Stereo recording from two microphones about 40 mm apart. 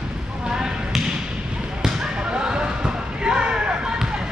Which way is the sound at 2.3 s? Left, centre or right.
Right.